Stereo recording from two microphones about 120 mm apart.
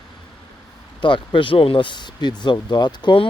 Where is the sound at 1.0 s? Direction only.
40° left (ahead or behind).